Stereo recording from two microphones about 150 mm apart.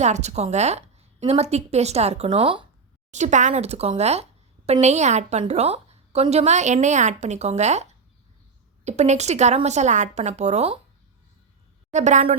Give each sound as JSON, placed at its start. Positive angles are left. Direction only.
{"t": 0.0, "sound": "a woman's voice", "side_deg": -50}
{"t": 3.1, "sound": "speech", "side_deg": -50}
{"t": 11.9, "sound": "speech", "side_deg": -50}